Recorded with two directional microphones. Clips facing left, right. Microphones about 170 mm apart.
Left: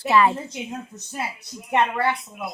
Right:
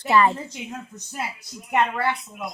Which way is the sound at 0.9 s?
25° left (ahead or behind).